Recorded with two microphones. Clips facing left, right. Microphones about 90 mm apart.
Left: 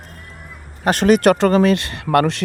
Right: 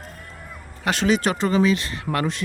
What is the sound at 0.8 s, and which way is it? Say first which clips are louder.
Speech: left 7 dB; 50° left (ahead or behind).